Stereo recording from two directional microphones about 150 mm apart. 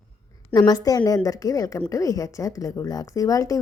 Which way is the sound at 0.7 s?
25° left (ahead or behind).